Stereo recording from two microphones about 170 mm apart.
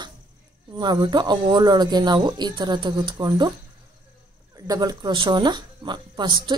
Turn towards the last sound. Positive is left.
turn(degrees=-25)  # may be behind; listen again after turning